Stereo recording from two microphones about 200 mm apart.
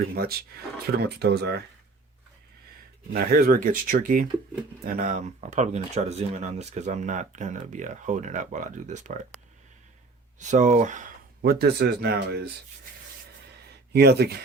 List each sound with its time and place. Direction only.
0.5 s speech: 50° right (ahead or behind)
3.1 s speech: 50° right (ahead or behind)
10.4 s speech: 40° right (ahead or behind)
11.6 s speech: 55° right (ahead or behind)
13.9 s speech: 55° right (ahead or behind)